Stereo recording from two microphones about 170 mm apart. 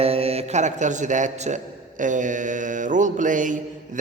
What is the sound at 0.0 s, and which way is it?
A man's voice, 35° right (ahead or behind).